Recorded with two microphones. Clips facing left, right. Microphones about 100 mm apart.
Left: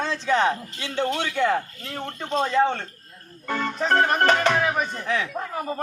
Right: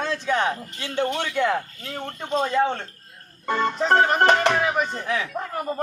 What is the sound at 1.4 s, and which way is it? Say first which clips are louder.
Speech: left 1 dB; centre (ahead or behind).